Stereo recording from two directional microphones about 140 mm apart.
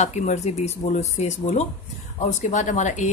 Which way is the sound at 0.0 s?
55° left (ahead or behind).